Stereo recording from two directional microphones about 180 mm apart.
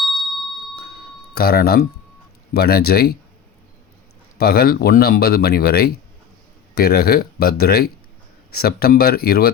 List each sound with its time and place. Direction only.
1.4 s speech: 60° left (ahead or behind)
4.4 s speech: 60° left (ahead or behind)